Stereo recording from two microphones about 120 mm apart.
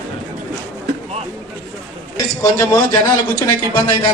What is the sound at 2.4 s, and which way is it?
Speech, 30° left (ahead or behind).